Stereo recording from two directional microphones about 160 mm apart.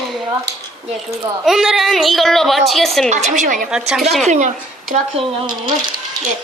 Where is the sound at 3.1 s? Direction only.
50° right (ahead or behind).